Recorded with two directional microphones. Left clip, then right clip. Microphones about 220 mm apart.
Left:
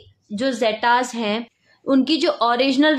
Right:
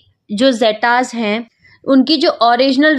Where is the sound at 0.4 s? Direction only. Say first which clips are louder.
Right 8 dB; 40° right (ahead or behind).